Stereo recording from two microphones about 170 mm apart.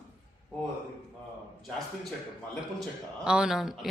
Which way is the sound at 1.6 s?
Centre (ahead or behind).